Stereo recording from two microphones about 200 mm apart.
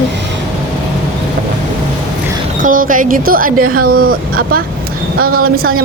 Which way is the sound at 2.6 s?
45° right (ahead or behind).